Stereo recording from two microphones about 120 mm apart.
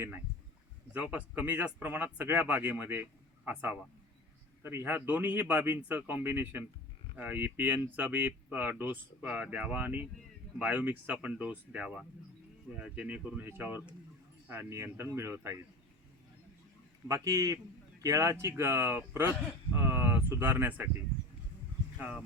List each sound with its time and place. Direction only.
0.9 s speech: 15° right (ahead or behind)
17.1 s speech: 30° right (ahead or behind)
21.9 s speech: 10° right (ahead or behind)